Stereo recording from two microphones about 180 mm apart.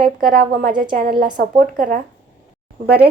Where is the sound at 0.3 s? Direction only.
50° right (ahead or behind).